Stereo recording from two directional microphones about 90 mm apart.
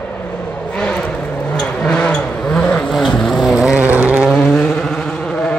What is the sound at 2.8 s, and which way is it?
Vehicle, centre (ahead or behind).